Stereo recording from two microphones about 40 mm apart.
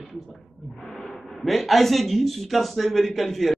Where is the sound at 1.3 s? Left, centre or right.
Centre.